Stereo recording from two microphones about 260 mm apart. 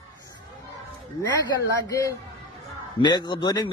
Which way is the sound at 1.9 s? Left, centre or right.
Centre.